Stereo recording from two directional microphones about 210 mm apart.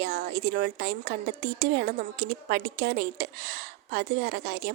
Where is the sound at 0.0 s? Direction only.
45° right (ahead or behind).